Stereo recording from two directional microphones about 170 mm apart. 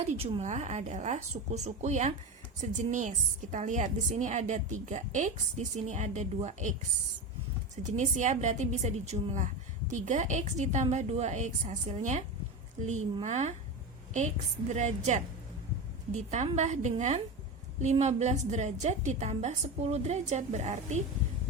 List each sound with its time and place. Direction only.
0.0 s a woman's voice: 40° right (ahead or behind)
7.8 s a woman's voice: 45° right (ahead or behind)
14.7 s a woman's voice: 45° right (ahead or behind)